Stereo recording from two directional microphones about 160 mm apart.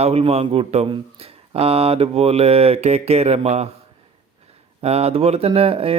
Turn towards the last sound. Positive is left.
turn(degrees=-35)  # may be behind; listen again after turning